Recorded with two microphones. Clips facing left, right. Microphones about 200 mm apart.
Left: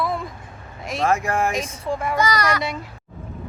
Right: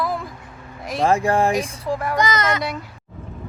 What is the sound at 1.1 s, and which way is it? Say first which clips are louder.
Speech: right 4 dB; 30° right (ahead or behind).